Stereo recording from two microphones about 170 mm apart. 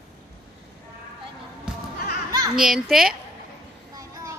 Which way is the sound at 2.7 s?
Centre (ahead or behind).